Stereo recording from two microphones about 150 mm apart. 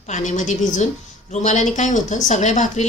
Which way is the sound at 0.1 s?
55° left (ahead or behind).